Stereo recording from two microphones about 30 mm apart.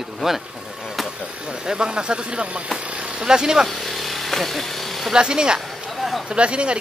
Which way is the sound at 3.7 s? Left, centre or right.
Centre.